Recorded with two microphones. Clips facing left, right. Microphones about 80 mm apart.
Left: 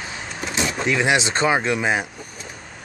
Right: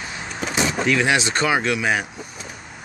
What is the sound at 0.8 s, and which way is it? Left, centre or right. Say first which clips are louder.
Speech: left 1 dB; left.